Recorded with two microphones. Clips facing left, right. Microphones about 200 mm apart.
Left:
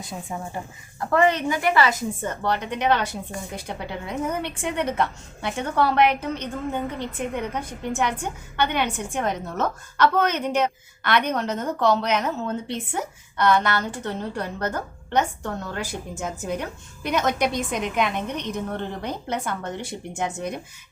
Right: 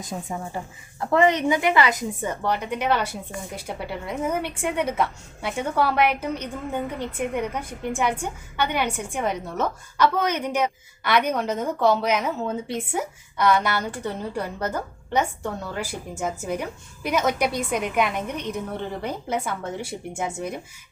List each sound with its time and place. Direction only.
1.1 s a woman's voice: 20° right (ahead or behind)